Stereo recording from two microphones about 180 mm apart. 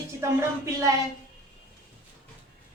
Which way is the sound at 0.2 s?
15° right (ahead or behind).